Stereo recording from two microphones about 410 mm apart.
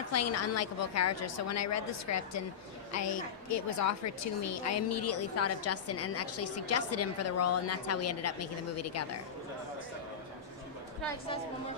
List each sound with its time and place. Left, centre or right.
0.1 s a woman's voice: left